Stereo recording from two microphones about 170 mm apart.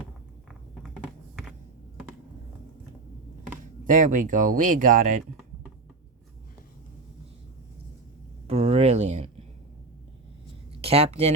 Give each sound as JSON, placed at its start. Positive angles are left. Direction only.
{"t": 0.8, "sound": "typing", "side_deg": 0}
{"t": 3.8, "sound": "speech", "side_deg": -50}
{"t": 8.4, "sound": "a sound", "side_deg": -35}
{"t": 10.8, "sound": "speech", "side_deg": -35}